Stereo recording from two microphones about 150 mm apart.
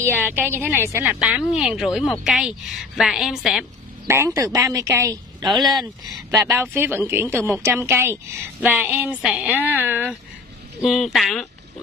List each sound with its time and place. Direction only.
0.0 s a woman's voice: 15° right (ahead or behind)
4.1 s speech: 20° right (ahead or behind)
5.7 s a woman's voice: centre (ahead or behind)
6.3 s speech: 20° right (ahead or behind)
10.8 s a woman's voice: centre (ahead or behind)